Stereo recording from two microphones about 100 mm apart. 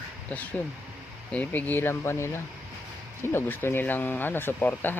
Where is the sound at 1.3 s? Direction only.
15° left (ahead or behind).